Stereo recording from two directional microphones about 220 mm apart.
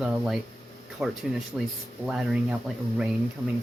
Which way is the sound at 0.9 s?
5° right (ahead or behind).